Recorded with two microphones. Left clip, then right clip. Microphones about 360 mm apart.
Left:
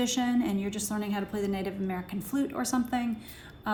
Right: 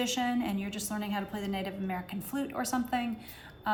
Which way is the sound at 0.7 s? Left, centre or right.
Right.